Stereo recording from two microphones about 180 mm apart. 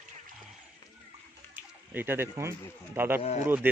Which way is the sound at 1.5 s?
10° right (ahead or behind).